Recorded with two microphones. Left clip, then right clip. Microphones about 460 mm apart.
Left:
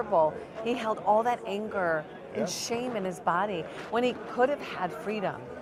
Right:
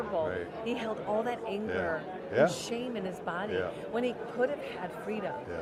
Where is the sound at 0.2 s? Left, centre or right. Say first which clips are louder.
Left 6 dB; left.